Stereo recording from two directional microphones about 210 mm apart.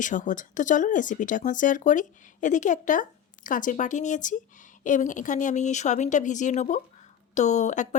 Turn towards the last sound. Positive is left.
turn(degrees=35)  # may be behind; listen again after turning